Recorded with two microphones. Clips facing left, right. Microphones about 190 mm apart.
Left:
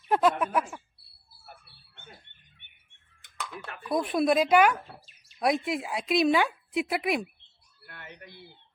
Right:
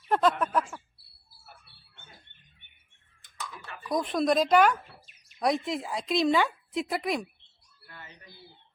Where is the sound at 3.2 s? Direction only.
65° left (ahead or behind).